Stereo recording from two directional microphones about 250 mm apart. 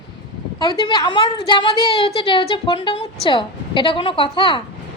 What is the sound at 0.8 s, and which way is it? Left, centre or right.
Speech, centre.